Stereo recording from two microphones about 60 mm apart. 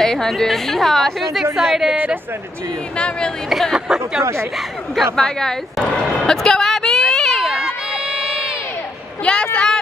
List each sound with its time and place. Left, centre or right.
0.0 s a woman's voice: centre
3.4 s a woman's voice: centre
3.7 s speech: centre
4.2 s speech: right
4.9 s a woman's voice: centre
6.2 s a sound: centre
9.2 s a woman's voice: centre